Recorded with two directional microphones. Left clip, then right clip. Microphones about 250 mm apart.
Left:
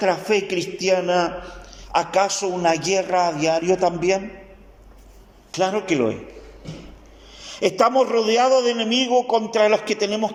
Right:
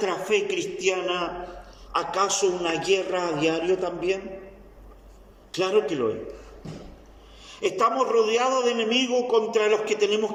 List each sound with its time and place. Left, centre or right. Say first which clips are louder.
0.0 s a man's voice: left 4 dB; left
5.5 s a man's voice: left 2 dB; left
7.4 s a man's voice: left 5 dB; left